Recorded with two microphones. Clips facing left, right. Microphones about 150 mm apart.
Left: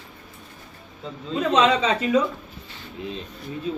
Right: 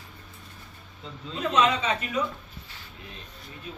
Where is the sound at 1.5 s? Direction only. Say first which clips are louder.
Left 4 dB; 90° left.